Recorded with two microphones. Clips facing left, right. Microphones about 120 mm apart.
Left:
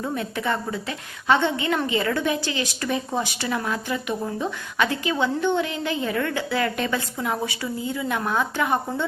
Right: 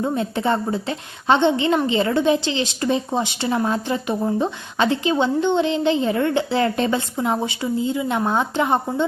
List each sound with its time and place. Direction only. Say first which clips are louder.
0.0 s speech: right 5 dB; 25° right (ahead or behind)